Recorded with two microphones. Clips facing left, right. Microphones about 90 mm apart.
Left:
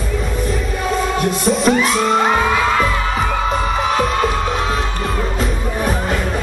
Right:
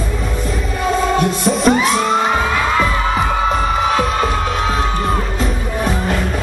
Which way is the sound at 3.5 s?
Centre (ahead or behind).